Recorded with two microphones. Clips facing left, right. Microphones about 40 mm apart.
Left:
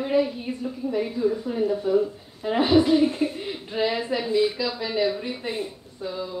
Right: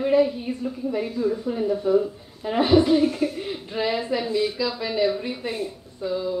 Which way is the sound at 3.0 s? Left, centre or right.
Left.